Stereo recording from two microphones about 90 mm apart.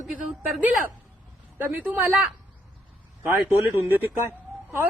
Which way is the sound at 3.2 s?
25° right (ahead or behind).